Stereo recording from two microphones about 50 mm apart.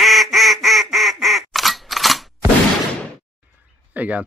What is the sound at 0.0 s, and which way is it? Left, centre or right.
Quack, centre.